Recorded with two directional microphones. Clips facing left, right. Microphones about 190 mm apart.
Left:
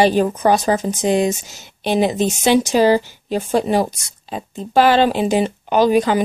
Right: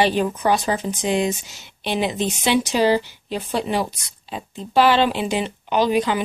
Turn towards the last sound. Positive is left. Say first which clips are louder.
# left 5 dB
turn(degrees=45)  # may be behind; listen again after turning